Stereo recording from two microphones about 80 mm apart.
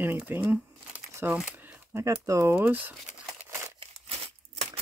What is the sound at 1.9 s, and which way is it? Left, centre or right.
Speech, right.